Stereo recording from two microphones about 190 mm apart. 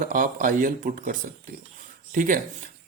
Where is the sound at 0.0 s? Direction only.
45° right (ahead or behind).